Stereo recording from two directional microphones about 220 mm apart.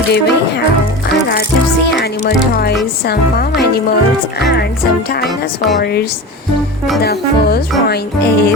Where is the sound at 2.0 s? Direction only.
50° left (ahead or behind).